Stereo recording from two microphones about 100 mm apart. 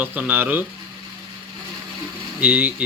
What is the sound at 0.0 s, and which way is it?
Speech, 20° right (ahead or behind).